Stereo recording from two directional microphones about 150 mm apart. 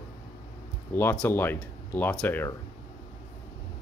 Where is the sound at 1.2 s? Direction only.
15° left (ahead or behind).